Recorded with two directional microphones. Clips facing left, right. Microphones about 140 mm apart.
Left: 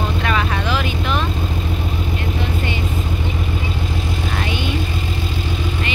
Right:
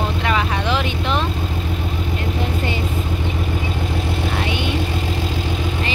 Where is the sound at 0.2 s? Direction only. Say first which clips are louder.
Even; 20° right (ahead or behind).